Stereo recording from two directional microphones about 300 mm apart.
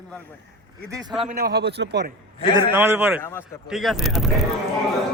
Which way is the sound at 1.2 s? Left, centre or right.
Right.